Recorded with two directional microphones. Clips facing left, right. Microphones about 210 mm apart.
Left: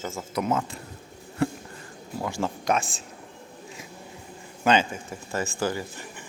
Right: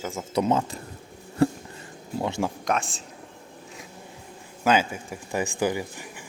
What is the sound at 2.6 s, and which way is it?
Speech, 5° left (ahead or behind).